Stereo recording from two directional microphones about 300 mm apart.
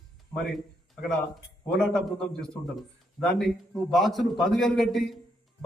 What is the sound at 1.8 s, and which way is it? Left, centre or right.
Speech, centre.